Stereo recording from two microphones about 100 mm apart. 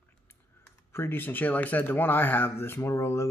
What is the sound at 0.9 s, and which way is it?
Speech, 25° left (ahead or behind).